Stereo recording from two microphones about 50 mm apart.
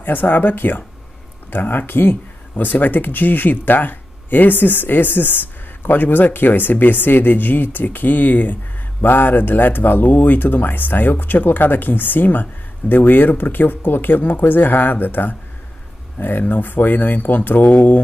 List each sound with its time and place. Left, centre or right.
0.0 s speech: left